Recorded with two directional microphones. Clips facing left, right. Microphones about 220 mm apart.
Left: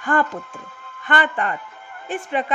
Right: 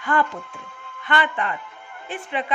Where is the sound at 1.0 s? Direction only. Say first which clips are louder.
Left 2 dB; 45° left (ahead or behind).